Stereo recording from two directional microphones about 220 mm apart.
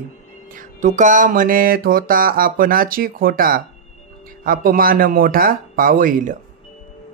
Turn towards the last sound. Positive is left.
turn(degrees=-35)  # may be behind; listen again after turning